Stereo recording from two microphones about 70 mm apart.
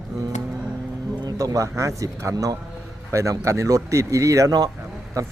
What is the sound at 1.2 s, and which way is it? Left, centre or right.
Speech, right.